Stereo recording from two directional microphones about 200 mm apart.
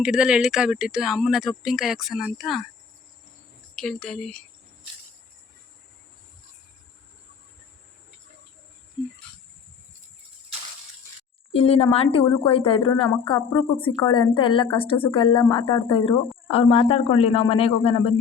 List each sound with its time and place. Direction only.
0.0 s speech: 5° right (ahead or behind)
3.8 s speech: 5° left (ahead or behind)
11.5 s speech: 30° left (ahead or behind)